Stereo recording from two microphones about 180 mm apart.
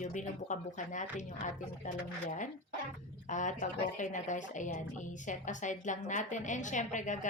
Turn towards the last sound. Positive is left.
turn(degrees=45)  # may be behind; listen again after turning